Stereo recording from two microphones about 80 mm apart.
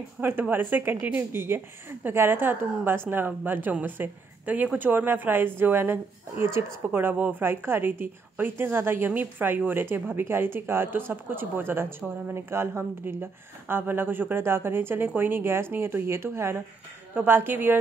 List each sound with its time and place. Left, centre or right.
0.2 s a woman's voice: right